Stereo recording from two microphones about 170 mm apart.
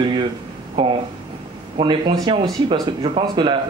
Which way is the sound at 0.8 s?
30° right (ahead or behind).